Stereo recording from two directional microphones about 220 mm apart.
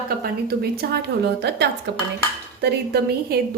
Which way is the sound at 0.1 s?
45° right (ahead or behind).